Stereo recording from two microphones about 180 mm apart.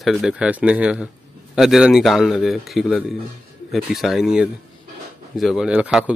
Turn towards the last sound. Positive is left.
turn(degrees=-10)  # may be behind; listen again after turning